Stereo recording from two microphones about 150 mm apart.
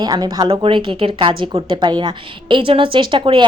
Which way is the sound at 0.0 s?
25° right (ahead or behind).